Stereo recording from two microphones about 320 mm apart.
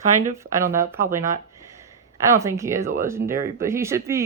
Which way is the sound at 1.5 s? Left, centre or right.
Centre.